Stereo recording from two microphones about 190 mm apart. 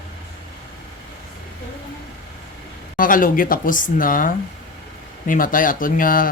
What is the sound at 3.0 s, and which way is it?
Speech, 45° left (ahead or behind).